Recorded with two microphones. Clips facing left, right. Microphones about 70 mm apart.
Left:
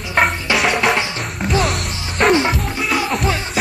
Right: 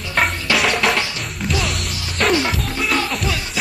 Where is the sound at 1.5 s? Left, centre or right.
Left.